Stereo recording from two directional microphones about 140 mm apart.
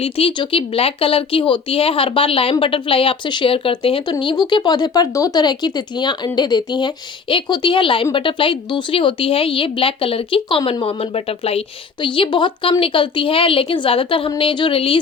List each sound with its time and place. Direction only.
0.0 s speech: 40° left (ahead or behind)